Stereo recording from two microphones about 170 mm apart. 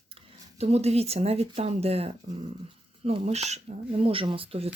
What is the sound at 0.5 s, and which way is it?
Speech, 40° right (ahead or behind).